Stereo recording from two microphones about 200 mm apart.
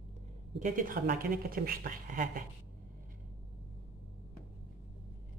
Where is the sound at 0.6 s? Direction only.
40° right (ahead or behind).